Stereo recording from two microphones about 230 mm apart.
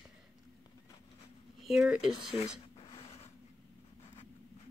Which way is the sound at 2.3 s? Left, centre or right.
Left.